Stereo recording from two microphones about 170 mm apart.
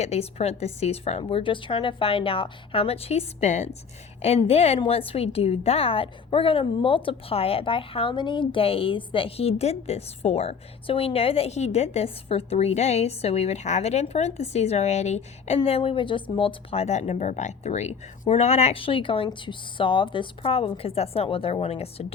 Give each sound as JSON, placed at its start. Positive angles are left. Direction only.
{"t": 0.0, "sound": "a woman's voice", "side_deg": 40}